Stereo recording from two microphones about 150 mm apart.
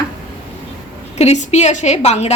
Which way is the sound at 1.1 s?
45° left (ahead or behind).